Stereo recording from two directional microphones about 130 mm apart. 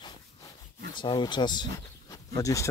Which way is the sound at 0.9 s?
35° left (ahead or behind).